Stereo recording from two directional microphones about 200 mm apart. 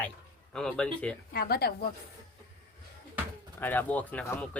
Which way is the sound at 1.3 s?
50° left (ahead or behind).